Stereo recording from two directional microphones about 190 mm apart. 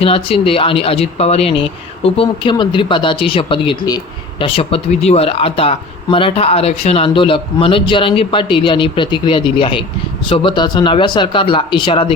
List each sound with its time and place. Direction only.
0.0 s speech: 30° left (ahead or behind)